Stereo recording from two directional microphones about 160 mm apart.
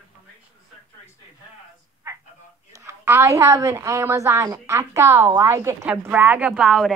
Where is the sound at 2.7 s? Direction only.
15° right (ahead or behind).